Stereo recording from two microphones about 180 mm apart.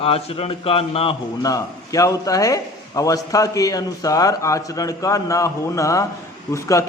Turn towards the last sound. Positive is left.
turn(degrees=15)  # may be behind; listen again after turning